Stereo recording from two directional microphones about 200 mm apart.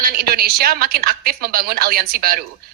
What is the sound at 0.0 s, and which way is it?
A woman's voice, 50° right (ahead or behind).